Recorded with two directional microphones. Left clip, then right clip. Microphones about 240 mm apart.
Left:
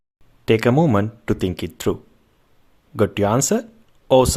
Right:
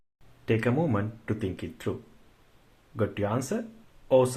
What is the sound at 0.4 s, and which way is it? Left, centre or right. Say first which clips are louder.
Speech: left 10 dB; left.